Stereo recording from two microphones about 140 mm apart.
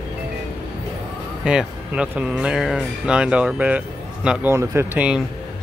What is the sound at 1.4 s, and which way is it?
Speech, 5° right (ahead or behind).